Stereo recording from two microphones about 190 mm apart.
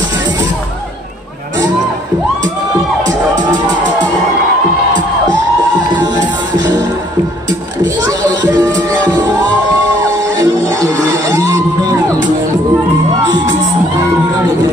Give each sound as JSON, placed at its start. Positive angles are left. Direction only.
{"t": 8.0, "sound": "music", "side_deg": -20}
{"t": 10.4, "sound": "music", "side_deg": -20}